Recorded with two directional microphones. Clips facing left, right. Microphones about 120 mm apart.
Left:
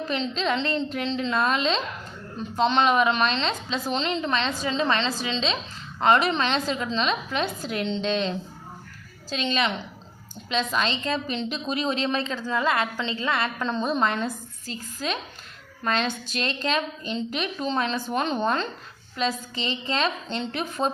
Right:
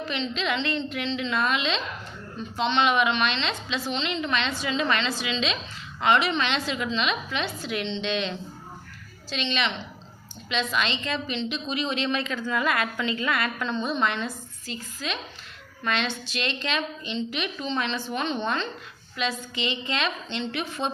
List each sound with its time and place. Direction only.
0.1 s a woman's voice: 35° left (ahead or behind)